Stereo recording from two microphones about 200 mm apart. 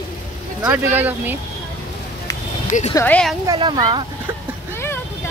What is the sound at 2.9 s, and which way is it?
Speech, 10° left (ahead or behind).